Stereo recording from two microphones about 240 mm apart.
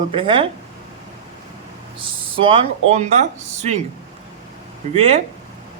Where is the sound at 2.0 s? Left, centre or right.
Right.